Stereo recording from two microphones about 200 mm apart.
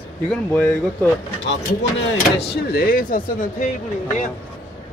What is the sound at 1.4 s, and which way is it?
Speech, 65° left (ahead or behind).